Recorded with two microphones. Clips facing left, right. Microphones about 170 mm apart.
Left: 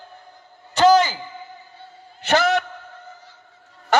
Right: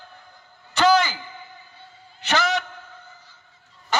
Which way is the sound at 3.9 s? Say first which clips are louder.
Left 6 dB; 70° left (ahead or behind).